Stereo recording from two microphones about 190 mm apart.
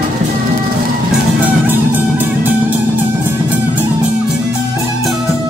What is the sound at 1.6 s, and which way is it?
Music, 10° right (ahead or behind).